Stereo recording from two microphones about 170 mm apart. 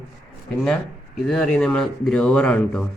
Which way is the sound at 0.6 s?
5° left (ahead or behind).